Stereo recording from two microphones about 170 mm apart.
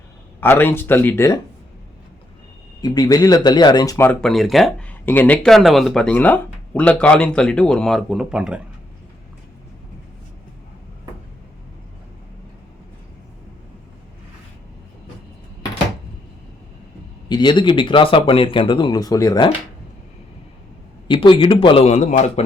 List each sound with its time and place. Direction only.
0.3 s speech: 10° left (ahead or behind)
2.8 s speech: 25° left (ahead or behind); by 8.6 s 5° right (ahead or behind)
17.2 s speech: 25° left (ahead or behind)
21.1 s a man's voice: 30° left (ahead or behind)